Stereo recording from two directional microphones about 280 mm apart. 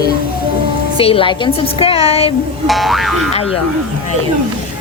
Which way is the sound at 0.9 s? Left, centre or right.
Centre.